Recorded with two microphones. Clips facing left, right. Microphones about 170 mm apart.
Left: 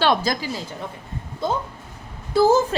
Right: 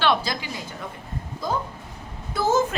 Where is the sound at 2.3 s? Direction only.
35° left (ahead or behind).